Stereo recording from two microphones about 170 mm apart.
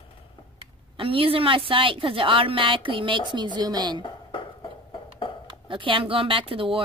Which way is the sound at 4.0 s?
30° left (ahead or behind).